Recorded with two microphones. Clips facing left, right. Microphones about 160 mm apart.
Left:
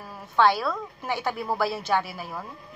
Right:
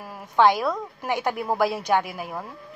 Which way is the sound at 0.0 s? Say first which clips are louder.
Right 3 dB; 15° right (ahead or behind).